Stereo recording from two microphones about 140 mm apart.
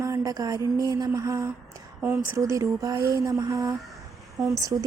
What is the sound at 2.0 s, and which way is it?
Speech, 15° right (ahead or behind).